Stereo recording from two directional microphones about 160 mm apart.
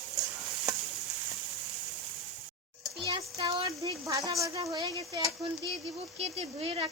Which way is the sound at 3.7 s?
20° right (ahead or behind).